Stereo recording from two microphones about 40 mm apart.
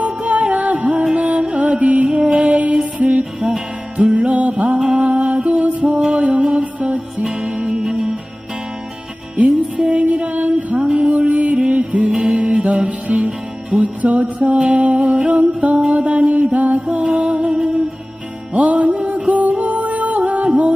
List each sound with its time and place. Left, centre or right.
0.0 s music: right
2.0 s music: right
6.0 s music: right
6.2 s music: right; by 8.1 s centre
9.9 s music: right
12.1 s music: centre
13.1 s music: right
13.8 s mantra: right
17.0 s music: right
17.4 s music: centre
18.5 s music: right